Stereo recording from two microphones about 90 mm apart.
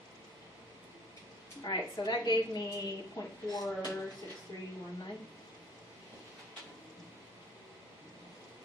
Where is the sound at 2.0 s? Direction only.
50° left (ahead or behind).